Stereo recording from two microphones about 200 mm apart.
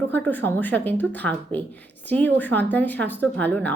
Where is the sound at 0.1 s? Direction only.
10° left (ahead or behind).